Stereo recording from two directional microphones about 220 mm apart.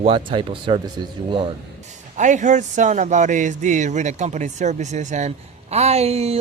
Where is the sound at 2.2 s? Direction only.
35° right (ahead or behind).